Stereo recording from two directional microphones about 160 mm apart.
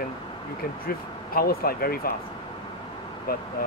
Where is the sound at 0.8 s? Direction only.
70° left (ahead or behind).